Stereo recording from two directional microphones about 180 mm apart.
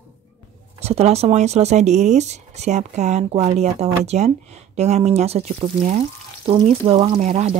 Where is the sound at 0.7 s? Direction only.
35° right (ahead or behind).